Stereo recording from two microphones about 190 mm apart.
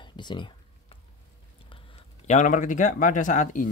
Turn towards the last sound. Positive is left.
turn(degrees=40)  # may be behind; listen again after turning